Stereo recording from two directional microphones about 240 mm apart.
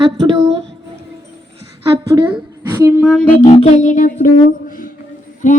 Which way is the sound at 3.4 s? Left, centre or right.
Left.